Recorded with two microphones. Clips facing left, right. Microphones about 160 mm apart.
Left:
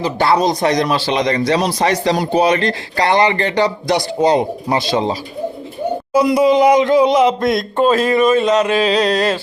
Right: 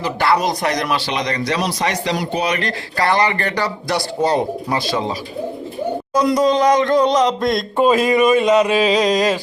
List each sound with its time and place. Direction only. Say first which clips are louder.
0.0 s a man's voice: left 3 dB; 25° left (ahead or behind)
6.1 s speech: left 3 dB; 5° left (ahead or behind)
7.9 s speech: even; 10° right (ahead or behind)